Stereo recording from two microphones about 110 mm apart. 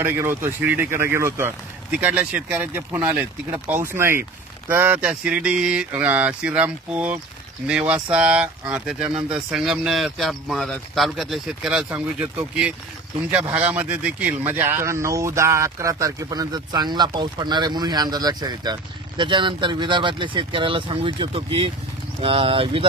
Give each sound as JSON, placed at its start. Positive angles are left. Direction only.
{"t": 0.0, "sound": "speech", "side_deg": -20}
{"t": 1.9, "sound": "speech", "side_deg": -15}
{"t": 13.5, "sound": "speech", "side_deg": -15}